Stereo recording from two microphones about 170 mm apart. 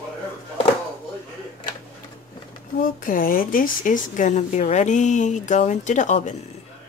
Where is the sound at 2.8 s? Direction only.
55° left (ahead or behind).